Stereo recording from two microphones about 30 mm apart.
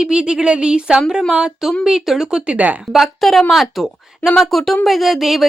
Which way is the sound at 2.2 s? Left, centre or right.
Right.